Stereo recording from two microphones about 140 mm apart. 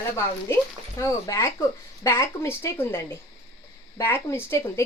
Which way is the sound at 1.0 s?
25° left (ahead or behind).